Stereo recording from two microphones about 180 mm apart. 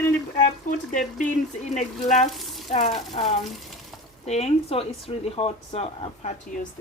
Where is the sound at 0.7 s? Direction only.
45° left (ahead or behind).